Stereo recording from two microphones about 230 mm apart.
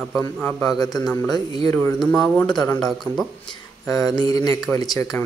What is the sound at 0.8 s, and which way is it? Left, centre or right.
Speech, centre.